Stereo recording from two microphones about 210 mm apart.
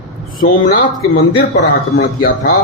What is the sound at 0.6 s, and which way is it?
Speech, 40° left (ahead or behind).